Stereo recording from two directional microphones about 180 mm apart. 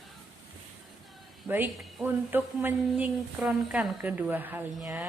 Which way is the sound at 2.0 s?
10° right (ahead or behind).